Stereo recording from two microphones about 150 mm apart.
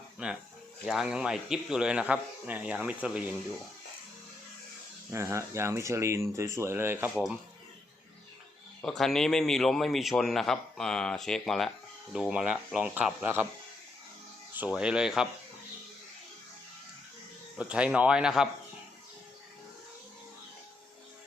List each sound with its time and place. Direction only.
0.2 s a man's voice: 5° right (ahead or behind)
5.1 s speech: 20° right (ahead or behind)
8.8 s a man's voice: 5° left (ahead or behind); by 13.5 s 10° right (ahead or behind)
14.5 s speech: 10° right (ahead or behind)
17.6 s speech: 5° right (ahead or behind)